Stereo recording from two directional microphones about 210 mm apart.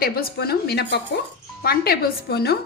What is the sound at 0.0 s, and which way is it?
Speech, 45° left (ahead or behind).